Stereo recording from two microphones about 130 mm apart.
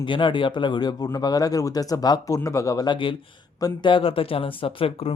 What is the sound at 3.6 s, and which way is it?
Speech, 30° left (ahead or behind).